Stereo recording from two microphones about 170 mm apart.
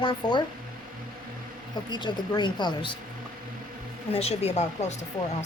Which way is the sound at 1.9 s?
25° left (ahead or behind).